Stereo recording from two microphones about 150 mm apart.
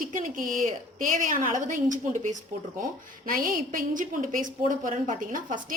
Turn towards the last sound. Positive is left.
turn(degrees=-60)  # may be behind; listen again after turning